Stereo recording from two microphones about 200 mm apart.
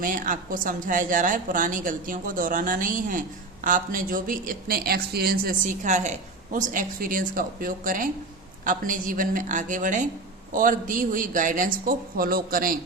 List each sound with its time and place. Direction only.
0.0 s a woman's voice: 40° right (ahead or behind)